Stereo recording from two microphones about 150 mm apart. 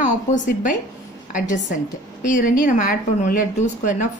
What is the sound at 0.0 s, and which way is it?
A woman's voice, 55° left (ahead or behind).